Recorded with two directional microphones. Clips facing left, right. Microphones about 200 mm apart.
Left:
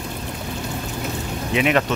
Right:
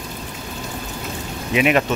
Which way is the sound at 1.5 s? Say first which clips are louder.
Right 2 dB; 10° right (ahead or behind).